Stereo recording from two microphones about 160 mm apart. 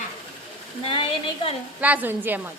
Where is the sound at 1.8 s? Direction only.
10° right (ahead or behind).